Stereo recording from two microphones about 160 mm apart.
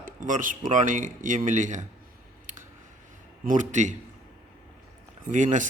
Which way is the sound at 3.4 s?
50° right (ahead or behind).